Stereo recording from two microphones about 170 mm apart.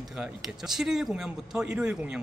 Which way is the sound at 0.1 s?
5° right (ahead or behind).